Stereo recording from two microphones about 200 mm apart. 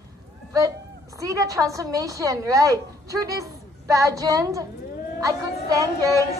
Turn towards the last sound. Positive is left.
turn(degrees=-15)  # may be behind; listen again after turning